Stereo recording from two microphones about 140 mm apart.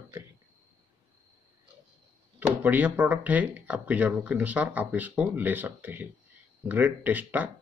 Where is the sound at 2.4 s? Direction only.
10° right (ahead or behind).